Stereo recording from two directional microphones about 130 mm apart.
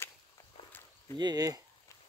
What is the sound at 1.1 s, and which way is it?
Speech, 30° right (ahead or behind).